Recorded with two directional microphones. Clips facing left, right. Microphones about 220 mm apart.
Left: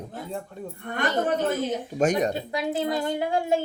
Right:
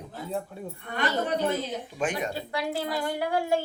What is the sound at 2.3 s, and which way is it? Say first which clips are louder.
A woman's voice: left 3 dB; 20° left (ahead or behind).